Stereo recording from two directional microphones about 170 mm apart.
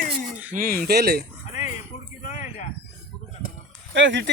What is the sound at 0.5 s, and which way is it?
Speech, 55° right (ahead or behind).